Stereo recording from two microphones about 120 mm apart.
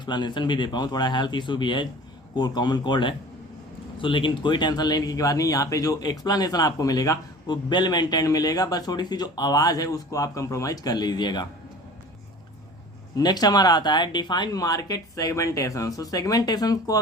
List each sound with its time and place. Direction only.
0.0 s speech: 40° left (ahead or behind)
13.1 s speech: 35° left (ahead or behind)